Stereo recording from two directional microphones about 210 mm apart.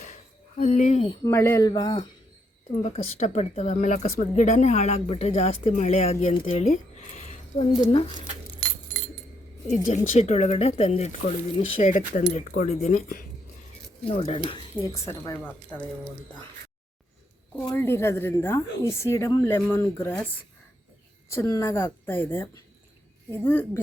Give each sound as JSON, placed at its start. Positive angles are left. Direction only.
{"t": 0.6, "sound": "speech", "side_deg": 35}
{"t": 2.8, "sound": "speech", "side_deg": 30}
{"t": 8.6, "sound": "keys jangling", "side_deg": -45}
{"t": 9.6, "sound": "speech", "side_deg": 35}
{"t": 14.1, "sound": "speech", "side_deg": 30}
{"t": 14.4, "sound": "speech", "side_deg": 15}
{"t": 17.7, "sound": "speech", "side_deg": 10}
{"t": 21.2, "sound": "speech", "side_deg": 15}